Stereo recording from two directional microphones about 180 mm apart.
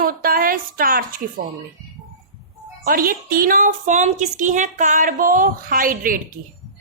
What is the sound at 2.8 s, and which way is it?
Speech, 55° right (ahead or behind).